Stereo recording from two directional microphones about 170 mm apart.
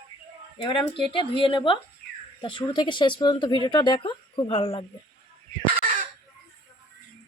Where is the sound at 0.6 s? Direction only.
30° left (ahead or behind).